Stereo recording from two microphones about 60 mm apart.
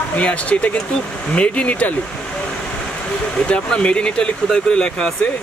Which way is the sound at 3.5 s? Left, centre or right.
Centre.